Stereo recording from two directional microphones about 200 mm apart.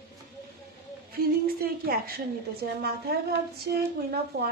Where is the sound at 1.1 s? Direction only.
50° right (ahead or behind).